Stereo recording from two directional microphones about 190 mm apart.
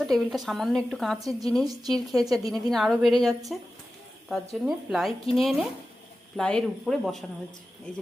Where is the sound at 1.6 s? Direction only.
20° right (ahead or behind).